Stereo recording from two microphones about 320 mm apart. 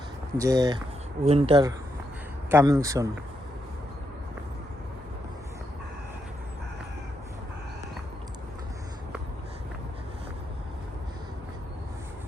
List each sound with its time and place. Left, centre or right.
0.3 s speech: centre